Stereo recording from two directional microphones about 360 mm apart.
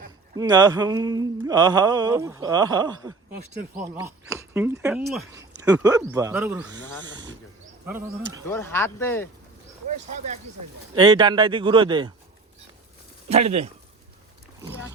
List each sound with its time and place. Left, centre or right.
0.3 s speech: centre
8.4 s speech: centre
10.9 s speech: centre
13.2 s speech: centre